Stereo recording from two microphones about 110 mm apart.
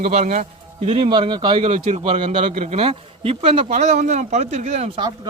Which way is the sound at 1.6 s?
90° right.